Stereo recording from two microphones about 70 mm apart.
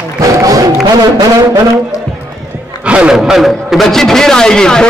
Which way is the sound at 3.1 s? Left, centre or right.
Centre.